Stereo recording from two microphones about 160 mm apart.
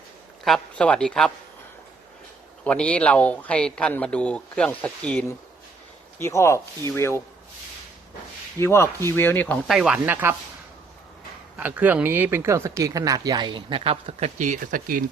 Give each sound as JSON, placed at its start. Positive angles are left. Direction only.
{"t": 0.4, "sound": "a man's voice", "side_deg": 5}
{"t": 2.6, "sound": "speech", "side_deg": 5}
{"t": 8.5, "sound": "speech", "side_deg": 15}
{"t": 9.7, "sound": "speech", "side_deg": -5}
{"t": 11.5, "sound": "speech", "side_deg": -10}